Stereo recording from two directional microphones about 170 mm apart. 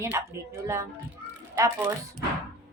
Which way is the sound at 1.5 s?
15° right (ahead or behind).